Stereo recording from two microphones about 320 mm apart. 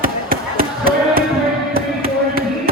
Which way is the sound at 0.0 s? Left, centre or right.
Right.